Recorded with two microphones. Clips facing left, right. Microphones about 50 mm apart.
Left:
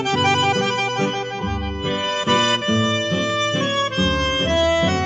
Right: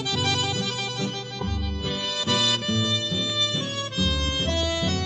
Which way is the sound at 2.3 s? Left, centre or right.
Left.